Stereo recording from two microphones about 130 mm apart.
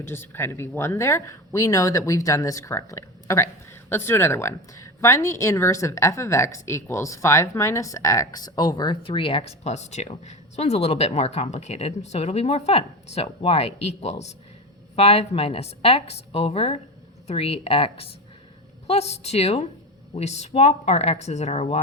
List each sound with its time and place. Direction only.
0.0 s a woman's voice: 15° left (ahead or behind); by 21.8 s 55° left (ahead or behind)